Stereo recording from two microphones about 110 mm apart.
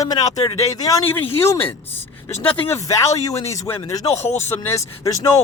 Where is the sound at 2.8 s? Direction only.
30° left (ahead or behind).